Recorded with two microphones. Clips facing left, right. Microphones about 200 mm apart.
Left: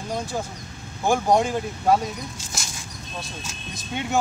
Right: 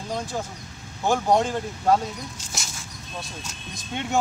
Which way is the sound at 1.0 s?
10° left (ahead or behind).